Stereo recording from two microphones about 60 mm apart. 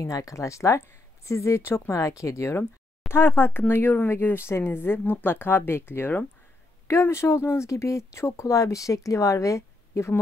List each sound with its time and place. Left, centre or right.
0.0 s speech: left
3.1 s speech: left